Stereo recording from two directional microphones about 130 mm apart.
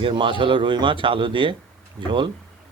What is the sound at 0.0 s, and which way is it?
Speech, 40° right (ahead or behind).